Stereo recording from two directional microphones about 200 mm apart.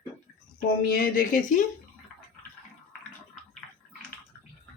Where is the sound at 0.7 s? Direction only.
40° left (ahead or behind).